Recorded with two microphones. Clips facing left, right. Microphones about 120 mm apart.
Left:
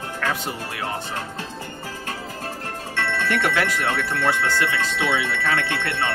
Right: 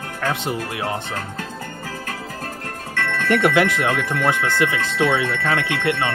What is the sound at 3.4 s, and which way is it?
Speech, 20° right (ahead or behind).